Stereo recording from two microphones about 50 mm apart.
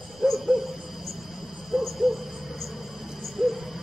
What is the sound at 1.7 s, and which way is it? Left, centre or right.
Owl, centre.